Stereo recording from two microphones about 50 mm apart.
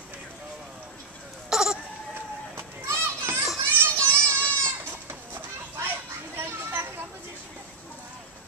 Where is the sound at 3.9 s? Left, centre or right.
Left.